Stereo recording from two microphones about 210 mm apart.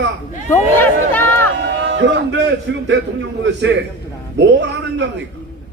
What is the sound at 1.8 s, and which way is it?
A man's voice, 60° right (ahead or behind).